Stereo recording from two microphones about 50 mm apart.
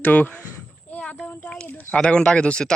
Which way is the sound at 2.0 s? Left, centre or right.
Centre.